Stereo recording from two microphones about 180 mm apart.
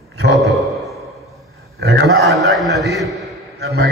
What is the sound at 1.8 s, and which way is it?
Speech, 65° right (ahead or behind).